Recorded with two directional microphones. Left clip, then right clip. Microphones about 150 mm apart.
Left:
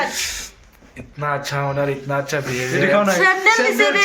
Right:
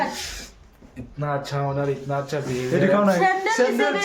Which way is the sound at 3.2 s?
20° right (ahead or behind).